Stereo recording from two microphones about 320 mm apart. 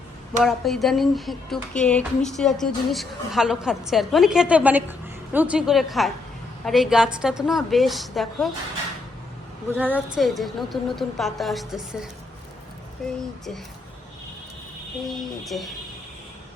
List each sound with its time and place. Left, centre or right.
0.4 s a woman's voice: centre
9.7 s a woman's voice: centre
13.0 s a woman's voice: centre
15.0 s a woman's voice: centre